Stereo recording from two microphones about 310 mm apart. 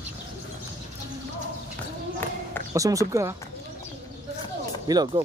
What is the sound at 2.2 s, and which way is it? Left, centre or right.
Basketball bounce, centre.